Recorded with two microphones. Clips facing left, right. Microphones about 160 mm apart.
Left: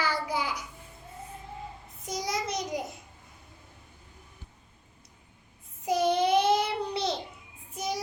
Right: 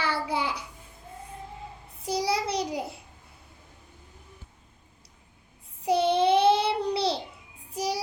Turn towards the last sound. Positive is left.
turn(degrees=-30)  # may be behind; listen again after turning